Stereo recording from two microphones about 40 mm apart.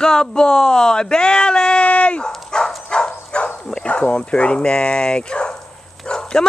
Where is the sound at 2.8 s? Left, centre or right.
Left.